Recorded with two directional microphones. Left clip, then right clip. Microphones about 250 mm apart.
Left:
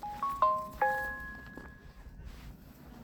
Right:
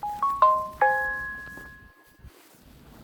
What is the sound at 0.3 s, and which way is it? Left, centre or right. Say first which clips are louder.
Music: right 8 dB; right.